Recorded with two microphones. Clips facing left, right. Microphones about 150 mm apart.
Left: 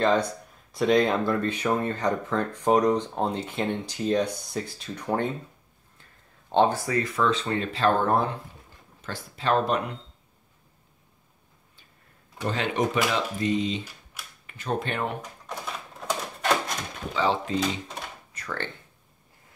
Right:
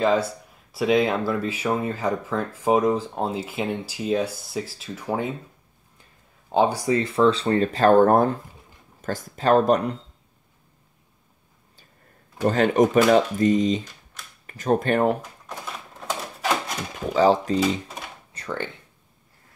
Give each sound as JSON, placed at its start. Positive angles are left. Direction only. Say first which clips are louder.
{"t": 0.0, "sound": "speech", "louder": "right 2 dB", "side_deg": -5}
{"t": 6.5, "sound": "speech", "louder": "right 1 dB", "side_deg": -10}
{"t": 6.9, "sound": "speech", "louder": "right 6 dB", "side_deg": -30}
{"t": 12.4, "sound": "speech", "louder": "right 8 dB", "side_deg": -45}
{"t": 15.4, "sound": "typewriter", "louder": "even", "side_deg": -5}
{"t": 17.1, "sound": "speech", "louder": "right 7 dB", "side_deg": -40}
{"t": 17.6, "sound": "speech", "louder": "right 5 dB", "side_deg": -5}
{"t": 18.3, "sound": "a sound", "louder": "right 5 dB", "side_deg": -30}